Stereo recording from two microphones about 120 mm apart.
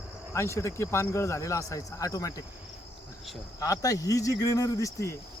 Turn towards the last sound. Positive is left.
turn(degrees=25)  # may be behind; listen again after turning